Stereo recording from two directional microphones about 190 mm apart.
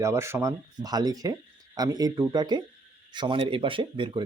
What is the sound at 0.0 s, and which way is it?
Speech, 15° right (ahead or behind).